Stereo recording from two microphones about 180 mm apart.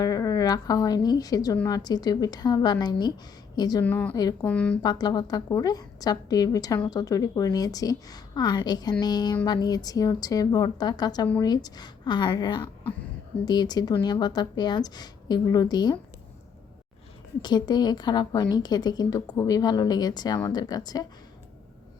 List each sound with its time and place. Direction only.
0.0 s a woman's voice: 20° left (ahead or behind)
3.8 s a woman's voice: 10° left (ahead or behind)
4.1 s a woman's voice: 20° left (ahead or behind)
4.4 s a woman's voice: 5° left (ahead or behind)
4.8 s a woman's voice: 25° left (ahead or behind)
17.4 s a woman's voice: 25° left (ahead or behind)